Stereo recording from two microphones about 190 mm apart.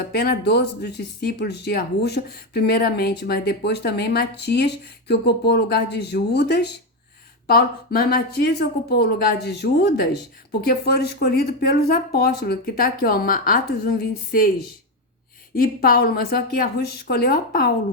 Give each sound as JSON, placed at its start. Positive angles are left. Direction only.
{"t": 0.1, "sound": "speech", "side_deg": 55}
{"t": 15.5, "sound": "speech", "side_deg": 50}